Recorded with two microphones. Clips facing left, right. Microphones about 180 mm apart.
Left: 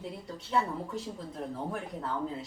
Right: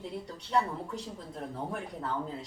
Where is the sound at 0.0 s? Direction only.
Centre (ahead or behind).